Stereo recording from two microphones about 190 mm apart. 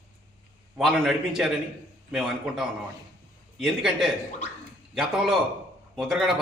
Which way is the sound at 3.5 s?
5° right (ahead or behind).